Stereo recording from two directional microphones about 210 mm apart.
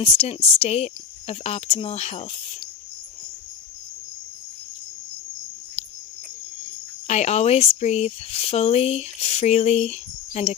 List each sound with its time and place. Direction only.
0.0 s speech: 30° left (ahead or behind)
7.1 s speech: 30° left (ahead or behind)